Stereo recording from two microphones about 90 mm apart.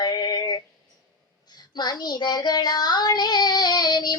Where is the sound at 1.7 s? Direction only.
50° left (ahead or behind).